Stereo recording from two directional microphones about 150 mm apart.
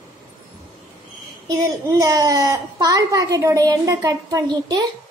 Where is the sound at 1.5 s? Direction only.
25° right (ahead or behind).